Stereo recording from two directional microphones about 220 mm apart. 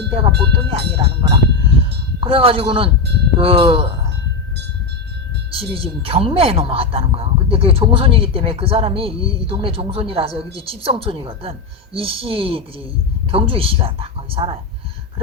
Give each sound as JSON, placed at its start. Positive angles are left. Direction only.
{"t": 0.2, "sound": "a woman's voice", "side_deg": -25}
{"t": 5.5, "sound": "a woman's voice", "side_deg": -25}